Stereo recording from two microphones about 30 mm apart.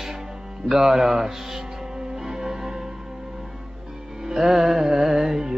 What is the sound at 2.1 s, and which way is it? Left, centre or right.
Music, centre.